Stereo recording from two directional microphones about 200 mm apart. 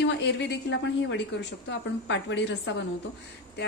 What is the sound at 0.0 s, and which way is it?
A woman's voice, 60° left (ahead or behind).